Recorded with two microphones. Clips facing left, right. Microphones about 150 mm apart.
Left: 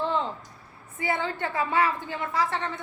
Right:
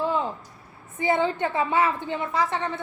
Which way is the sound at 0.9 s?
20° right (ahead or behind).